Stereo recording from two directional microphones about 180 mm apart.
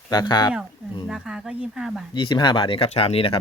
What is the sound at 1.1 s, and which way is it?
Speech, 5° right (ahead or behind).